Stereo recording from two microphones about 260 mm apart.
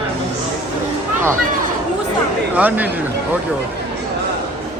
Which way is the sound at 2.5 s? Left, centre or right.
Centre.